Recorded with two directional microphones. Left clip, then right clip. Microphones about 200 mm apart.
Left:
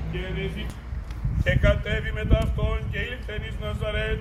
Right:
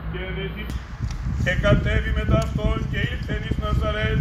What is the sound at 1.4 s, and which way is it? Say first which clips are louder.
Speech: right 2 dB; 15° left (ahead or behind).